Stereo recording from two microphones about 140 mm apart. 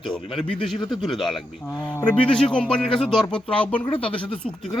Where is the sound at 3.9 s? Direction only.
40° left (ahead or behind).